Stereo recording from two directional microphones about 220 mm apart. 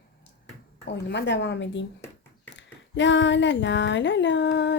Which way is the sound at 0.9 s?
50° left (ahead or behind).